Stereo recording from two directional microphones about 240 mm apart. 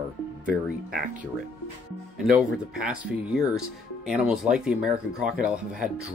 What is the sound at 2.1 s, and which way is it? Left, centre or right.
Speech, centre.